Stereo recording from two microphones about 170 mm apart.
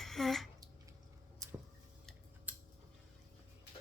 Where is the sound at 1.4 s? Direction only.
20° right (ahead or behind).